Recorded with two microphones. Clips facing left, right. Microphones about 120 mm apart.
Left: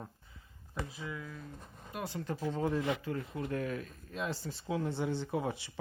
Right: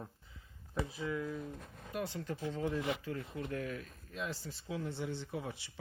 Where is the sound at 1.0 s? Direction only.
5° right (ahead or behind).